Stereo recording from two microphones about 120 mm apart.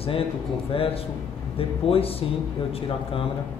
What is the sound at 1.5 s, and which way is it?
Speech, 50° left (ahead or behind).